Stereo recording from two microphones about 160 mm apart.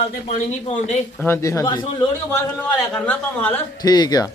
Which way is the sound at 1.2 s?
15° left (ahead or behind).